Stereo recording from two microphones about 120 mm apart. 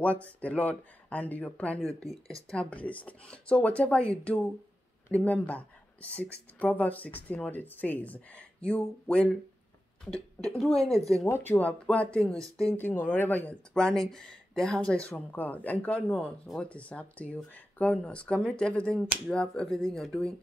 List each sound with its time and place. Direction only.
0.0 s speech: 10° left (ahead or behind)
10.4 s speech: 5° left (ahead or behind)
11.2 s speech: 15° left (ahead or behind)
12.4 s speech: 25° right (ahead or behind)
12.6 s speech: 15° left (ahead or behind)